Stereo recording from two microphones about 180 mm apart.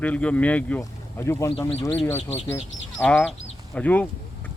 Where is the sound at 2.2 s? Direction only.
40° left (ahead or behind).